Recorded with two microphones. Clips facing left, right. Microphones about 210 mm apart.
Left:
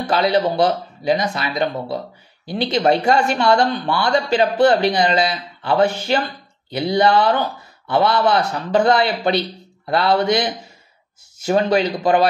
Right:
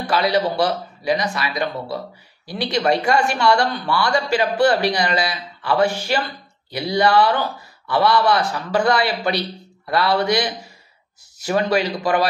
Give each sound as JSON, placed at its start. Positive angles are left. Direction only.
{"t": 0.1, "sound": "a man's voice", "side_deg": 25}
{"t": 11.4, "sound": "a man's voice", "side_deg": 25}